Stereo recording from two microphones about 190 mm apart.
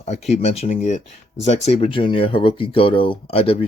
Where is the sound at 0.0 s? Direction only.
35° left (ahead or behind).